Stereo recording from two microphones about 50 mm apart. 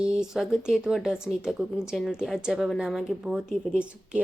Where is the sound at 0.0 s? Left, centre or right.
Centre.